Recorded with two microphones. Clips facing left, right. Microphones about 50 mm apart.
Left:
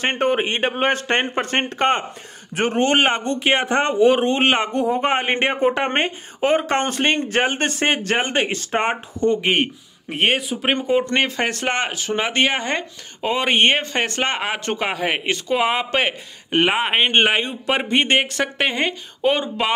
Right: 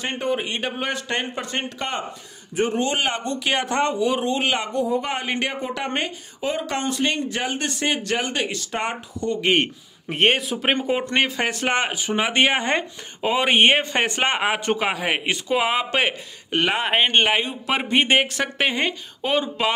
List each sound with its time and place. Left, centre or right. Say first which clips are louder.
0.0 s speech: left 5 dB; left
9.4 s a man's voice: even; centre
16.5 s speech: left 3 dB; centre
17.3 s a man's voice: left 2 dB; centre